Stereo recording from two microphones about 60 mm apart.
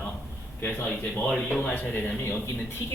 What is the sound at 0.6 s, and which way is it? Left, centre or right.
Speech, left.